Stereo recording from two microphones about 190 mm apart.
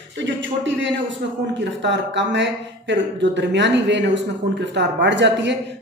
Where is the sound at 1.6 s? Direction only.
70° right (ahead or behind).